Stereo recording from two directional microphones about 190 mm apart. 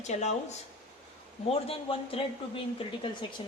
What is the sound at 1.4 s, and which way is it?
Speech, 30° left (ahead or behind).